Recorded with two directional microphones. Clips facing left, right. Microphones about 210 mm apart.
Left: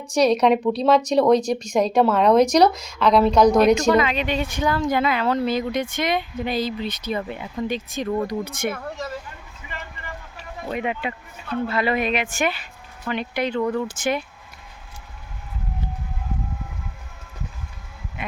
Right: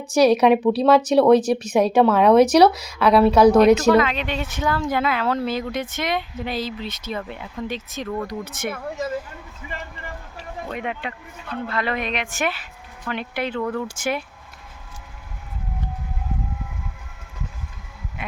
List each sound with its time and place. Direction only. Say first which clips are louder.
0.1 s speech: right 2 dB; 5° right (ahead or behind)
8.0 s speech: left 4 dB; 20° left (ahead or behind)
8.3 s speech: left 3 dB; 5° right (ahead or behind)
10.7 s speech: left 4 dB; 5° left (ahead or behind)
13.6 s speech: left 3 dB; 10° left (ahead or behind)
13.8 s speech: left 2 dB; 10° right (ahead or behind)